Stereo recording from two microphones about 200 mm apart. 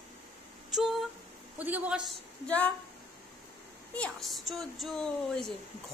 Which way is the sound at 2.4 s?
5° left (ahead or behind).